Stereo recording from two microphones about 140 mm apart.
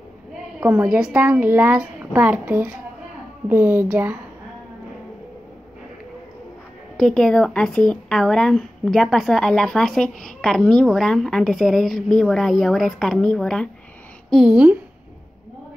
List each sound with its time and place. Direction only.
0.6 s a woman's voice: 15° right (ahead or behind)
7.0 s speech: 5° left (ahead or behind)
14.3 s a child's voice: 5° right (ahead or behind)